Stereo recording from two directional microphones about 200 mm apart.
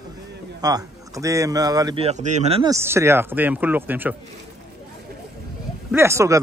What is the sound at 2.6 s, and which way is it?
Speech, 15° right (ahead or behind).